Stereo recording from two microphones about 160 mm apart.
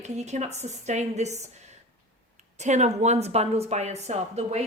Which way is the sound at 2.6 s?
45° right (ahead or behind).